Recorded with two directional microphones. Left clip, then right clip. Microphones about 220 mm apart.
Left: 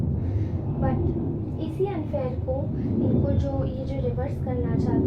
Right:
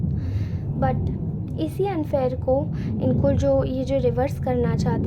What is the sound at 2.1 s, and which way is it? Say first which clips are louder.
Speech: right 9 dB; 50° right (ahead or behind).